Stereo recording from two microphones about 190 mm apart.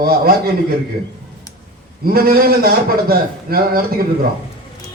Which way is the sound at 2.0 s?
50° right (ahead or behind).